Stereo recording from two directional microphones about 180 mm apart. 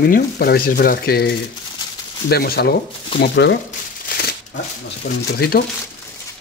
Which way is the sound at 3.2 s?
70° left (ahead or behind).